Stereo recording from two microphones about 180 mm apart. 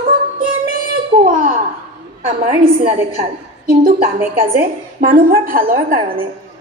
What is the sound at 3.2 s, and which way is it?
A woman's voice, 55° right (ahead or behind).